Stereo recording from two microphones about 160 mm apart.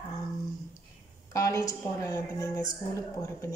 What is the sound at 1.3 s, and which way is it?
A woman's voice, 20° left (ahead or behind).